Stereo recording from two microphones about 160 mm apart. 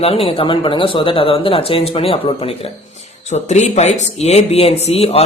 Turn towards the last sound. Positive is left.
turn(degrees=40)  # may be behind; listen again after turning